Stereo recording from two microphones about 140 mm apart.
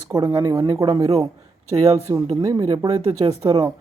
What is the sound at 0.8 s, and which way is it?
Speech, 40° right (ahead or behind).